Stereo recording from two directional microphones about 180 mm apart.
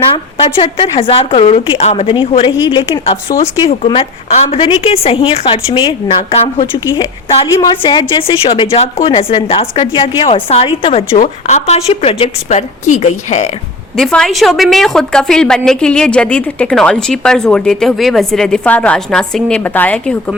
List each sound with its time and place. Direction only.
0.1 s a woman's voice: 35° left (ahead or behind)
6.7 s a woman's voice: 20° left (ahead or behind); by 13.5 s 35° left (ahead or behind)
13.9 s a woman's voice: 5° left (ahead or behind)